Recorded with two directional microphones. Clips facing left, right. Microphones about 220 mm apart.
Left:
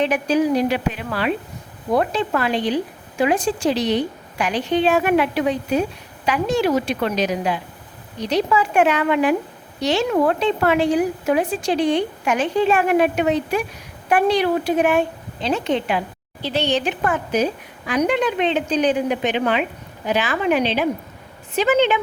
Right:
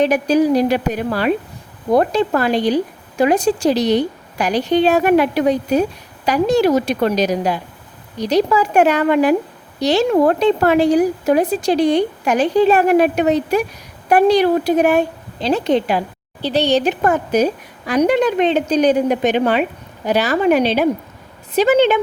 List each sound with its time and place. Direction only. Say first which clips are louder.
0.0 s a woman's voice: right 4 dB; 40° right (ahead or behind)